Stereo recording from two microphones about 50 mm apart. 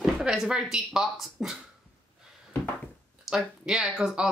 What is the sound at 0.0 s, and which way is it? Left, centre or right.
Speech, centre.